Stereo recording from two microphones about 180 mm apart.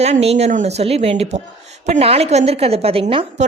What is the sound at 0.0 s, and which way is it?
A woman's voice, 35° right (ahead or behind).